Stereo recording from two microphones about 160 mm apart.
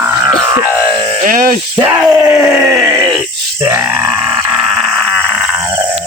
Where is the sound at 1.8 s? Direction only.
10° right (ahead or behind).